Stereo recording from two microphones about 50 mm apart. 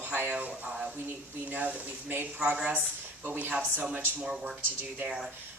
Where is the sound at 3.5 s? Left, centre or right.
Right.